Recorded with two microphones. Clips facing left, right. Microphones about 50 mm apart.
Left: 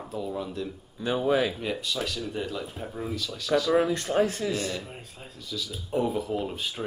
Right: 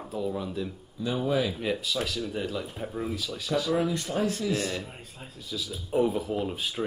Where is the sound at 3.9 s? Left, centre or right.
Left.